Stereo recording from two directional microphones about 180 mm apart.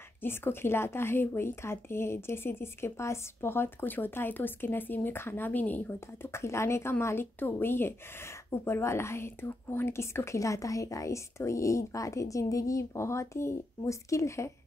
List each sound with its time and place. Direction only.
0.2 s speech: 10° left (ahead or behind)